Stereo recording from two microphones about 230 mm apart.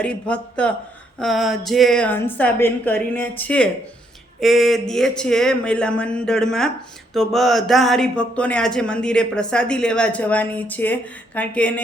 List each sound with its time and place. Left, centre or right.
0.0 s speech: centre